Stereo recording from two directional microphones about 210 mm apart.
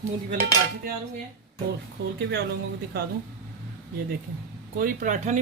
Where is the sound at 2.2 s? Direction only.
55° right (ahead or behind).